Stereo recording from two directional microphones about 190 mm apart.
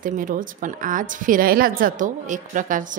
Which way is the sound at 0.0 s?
45° right (ahead or behind).